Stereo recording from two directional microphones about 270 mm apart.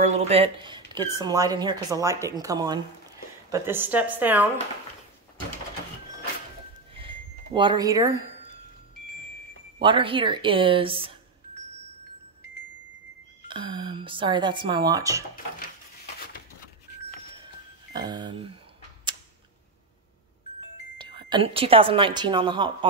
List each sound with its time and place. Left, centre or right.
0.0 s speech: right; by 4.5 s centre
6.9 s a sound: centre
9.8 s a woman's voice: centre
13.5 s speech: centre
17.9 s speech: centre
21.0 s a woman's voice: centre